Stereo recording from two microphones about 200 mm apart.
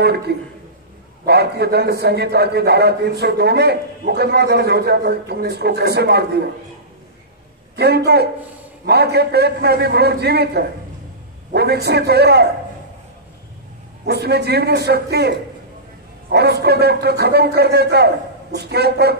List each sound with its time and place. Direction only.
0.3 s a man's voice: 50° right (ahead or behind)
7.7 s a man's voice: 55° right (ahead or behind)
14.0 s a man's voice: 55° right (ahead or behind)